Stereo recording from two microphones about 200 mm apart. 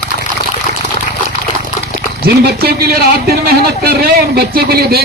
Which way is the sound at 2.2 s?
50° right (ahead or behind).